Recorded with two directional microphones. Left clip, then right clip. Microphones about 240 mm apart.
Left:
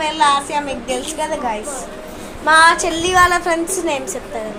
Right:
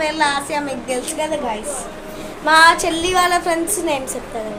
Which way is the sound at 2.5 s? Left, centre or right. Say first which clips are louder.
Even; centre.